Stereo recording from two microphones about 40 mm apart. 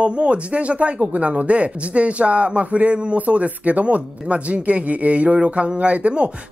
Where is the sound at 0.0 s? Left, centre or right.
Right.